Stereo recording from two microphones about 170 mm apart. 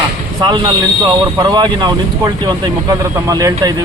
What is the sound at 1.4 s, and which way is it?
A man's voice, 25° right (ahead or behind).